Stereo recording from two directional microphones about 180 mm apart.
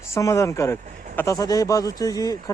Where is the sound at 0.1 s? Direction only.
15° left (ahead or behind).